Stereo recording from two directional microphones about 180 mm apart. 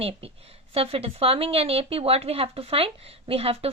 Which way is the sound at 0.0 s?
35° right (ahead or behind).